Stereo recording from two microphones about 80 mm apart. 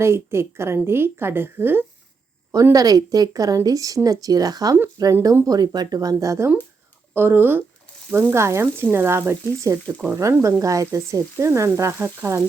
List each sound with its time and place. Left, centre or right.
0.0 s a woman's voice: right
2.7 s speech: right
7.1 s a woman's voice: right